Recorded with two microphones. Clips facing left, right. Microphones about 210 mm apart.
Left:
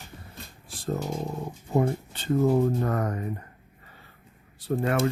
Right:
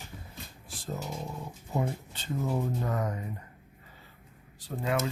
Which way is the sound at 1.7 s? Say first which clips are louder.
Left 7 dB; 55° left (ahead or behind).